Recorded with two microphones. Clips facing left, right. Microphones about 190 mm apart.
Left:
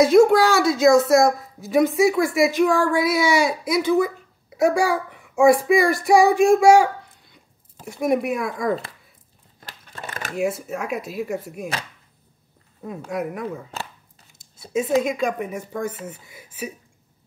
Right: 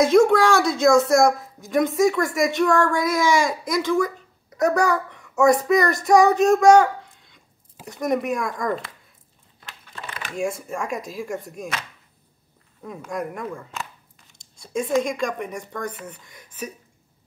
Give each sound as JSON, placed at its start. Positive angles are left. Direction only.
{"t": 0.0, "sound": "a woman's voice", "side_deg": 5}
{"t": 9.7, "sound": "a sound", "side_deg": 45}
{"t": 10.3, "sound": "a woman's voice", "side_deg": 5}
{"t": 13.1, "sound": "a woman's voice", "side_deg": 5}
{"t": 13.7, "sound": "speech", "side_deg": 35}
{"t": 14.4, "sound": "a sound", "side_deg": 5}
{"t": 15.0, "sound": "a woman's voice", "side_deg": 5}